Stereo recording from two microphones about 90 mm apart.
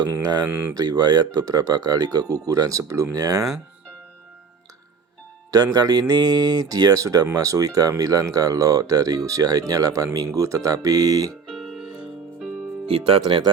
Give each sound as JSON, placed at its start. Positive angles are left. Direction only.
{"t": 0.2, "sound": "speech", "side_deg": -50}
{"t": 0.4, "sound": "speech", "side_deg": -25}
{"t": 0.7, "sound": "speech", "side_deg": -45}
{"t": 5.5, "sound": "speech", "side_deg": -45}
{"t": 11.4, "sound": "music", "side_deg": 0}
{"t": 13.2, "sound": "speech", "side_deg": -60}